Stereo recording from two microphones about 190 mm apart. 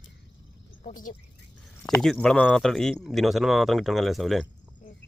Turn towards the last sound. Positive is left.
turn(degrees=0)  # may be behind; listen again after turning